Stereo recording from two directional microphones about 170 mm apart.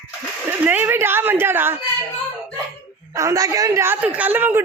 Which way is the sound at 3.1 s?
15° right (ahead or behind).